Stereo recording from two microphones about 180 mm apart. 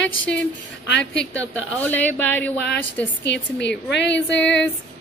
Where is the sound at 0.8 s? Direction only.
75° left (ahead or behind).